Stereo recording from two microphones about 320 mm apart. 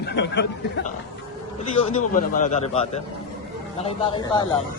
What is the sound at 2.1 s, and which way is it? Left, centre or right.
A man's voice, left.